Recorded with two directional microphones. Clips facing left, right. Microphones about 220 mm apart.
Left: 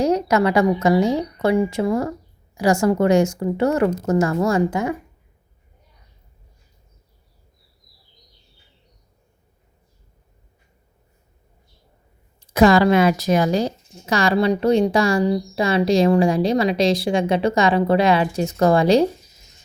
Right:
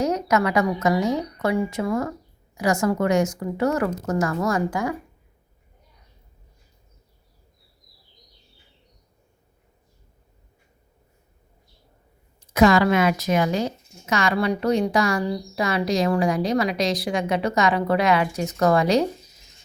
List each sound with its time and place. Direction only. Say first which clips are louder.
0.0 s a woman's voice: left 4 dB; 30° left (ahead or behind)
12.4 s a woman's voice: left 3 dB; 30° left (ahead or behind)